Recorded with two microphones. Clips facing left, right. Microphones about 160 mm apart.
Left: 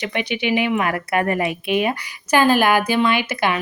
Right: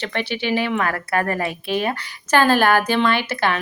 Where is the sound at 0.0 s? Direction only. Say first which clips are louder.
Left 1 dB; 15° left (ahead or behind).